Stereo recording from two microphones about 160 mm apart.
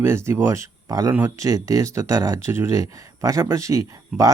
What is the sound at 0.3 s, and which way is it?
Speech, 15° right (ahead or behind).